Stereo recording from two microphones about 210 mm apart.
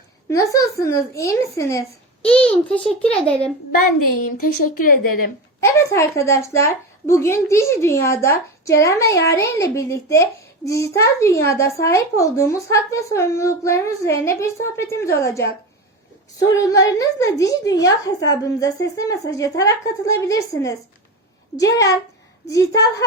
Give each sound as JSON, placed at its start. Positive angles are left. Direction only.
{"t": 0.3, "sound": "a child's voice", "side_deg": 15}
{"t": 4.4, "sound": "speech", "side_deg": 40}
{"t": 5.5, "sound": "speech", "side_deg": 15}